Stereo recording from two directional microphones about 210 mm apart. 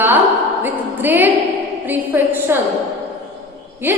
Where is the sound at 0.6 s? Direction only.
10° right (ahead or behind).